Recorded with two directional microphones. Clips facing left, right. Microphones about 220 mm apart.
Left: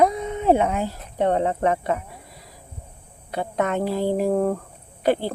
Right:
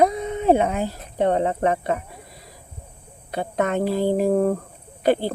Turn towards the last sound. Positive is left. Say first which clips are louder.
# right 1 dB
turn(degrees=-30)  # may be behind; listen again after turning